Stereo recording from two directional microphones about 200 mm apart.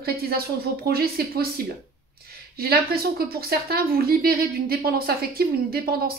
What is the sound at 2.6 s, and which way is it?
A woman's voice, 50° right (ahead or behind).